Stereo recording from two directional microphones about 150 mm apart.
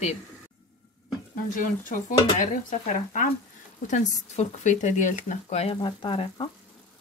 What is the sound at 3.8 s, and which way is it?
Speech, 55° left (ahead or behind).